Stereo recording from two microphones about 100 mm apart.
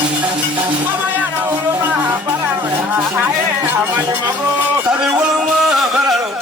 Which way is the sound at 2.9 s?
20° right (ahead or behind).